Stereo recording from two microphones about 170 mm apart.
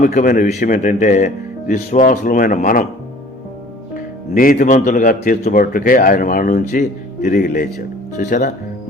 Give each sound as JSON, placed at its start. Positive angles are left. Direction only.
{"t": 0.0, "sound": "a man's voice", "side_deg": 55}
{"t": 3.9, "sound": "a man's voice", "side_deg": 55}